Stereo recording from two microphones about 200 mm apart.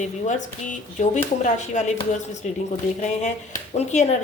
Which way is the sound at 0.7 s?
35° left (ahead or behind).